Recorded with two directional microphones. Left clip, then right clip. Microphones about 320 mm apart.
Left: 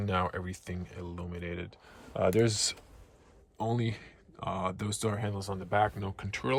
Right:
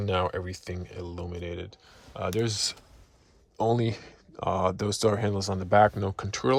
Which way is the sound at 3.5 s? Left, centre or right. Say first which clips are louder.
Right 8 dB; centre.